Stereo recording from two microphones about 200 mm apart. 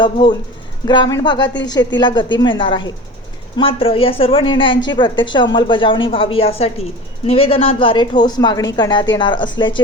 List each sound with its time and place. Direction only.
0.0 s speech: 25° left (ahead or behind)